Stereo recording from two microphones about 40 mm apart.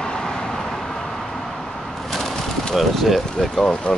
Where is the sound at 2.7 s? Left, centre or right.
Centre.